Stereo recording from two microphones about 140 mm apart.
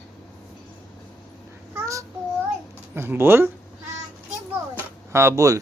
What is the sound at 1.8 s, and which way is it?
Child singing, 20° right (ahead or behind).